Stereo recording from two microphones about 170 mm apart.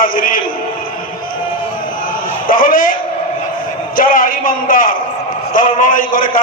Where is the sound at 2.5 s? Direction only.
55° left (ahead or behind).